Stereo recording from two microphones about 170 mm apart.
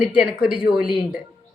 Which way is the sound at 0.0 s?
5° right (ahead or behind).